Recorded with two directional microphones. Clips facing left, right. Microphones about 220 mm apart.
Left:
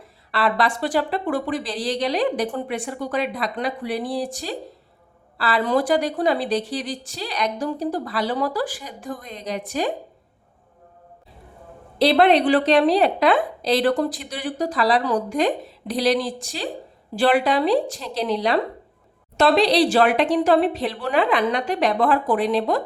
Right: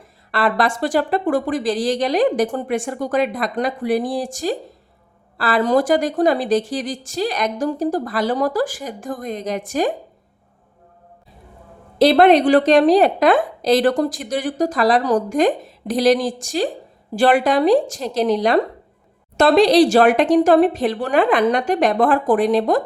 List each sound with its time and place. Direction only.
0.3 s a woman's voice: 45° right (ahead or behind)
11.9 s a woman's voice: 45° right (ahead or behind)